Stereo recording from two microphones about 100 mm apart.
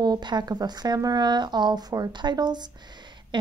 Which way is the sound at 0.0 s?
45° right (ahead or behind).